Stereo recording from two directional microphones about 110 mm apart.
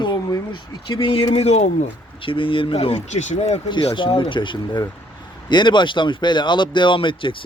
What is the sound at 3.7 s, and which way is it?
Speech, 50° left (ahead or behind).